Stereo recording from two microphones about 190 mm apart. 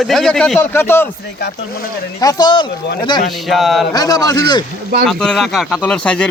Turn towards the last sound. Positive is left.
turn(degrees=5)  # may be behind; listen again after turning